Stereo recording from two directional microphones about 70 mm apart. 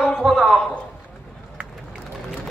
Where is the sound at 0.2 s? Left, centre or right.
Centre.